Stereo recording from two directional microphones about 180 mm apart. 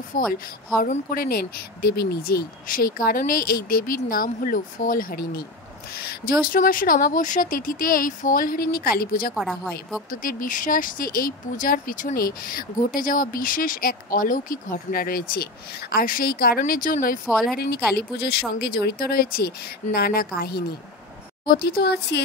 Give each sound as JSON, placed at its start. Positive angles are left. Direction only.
{"t": 0.1, "sound": "speech", "side_deg": 50}
{"t": 9.3, "sound": "speech", "side_deg": 0}
{"t": 10.2, "sound": "speech", "side_deg": 50}
{"t": 17.3, "sound": "speech", "side_deg": 0}
{"t": 17.9, "sound": "speech", "side_deg": 65}